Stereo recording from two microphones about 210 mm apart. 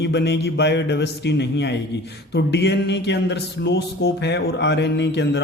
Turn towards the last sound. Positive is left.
turn(degrees=55)  # may be behind; listen again after turning